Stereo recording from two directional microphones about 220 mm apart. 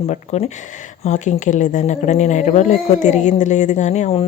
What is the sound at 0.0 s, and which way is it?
A woman's voice, 30° left (ahead or behind).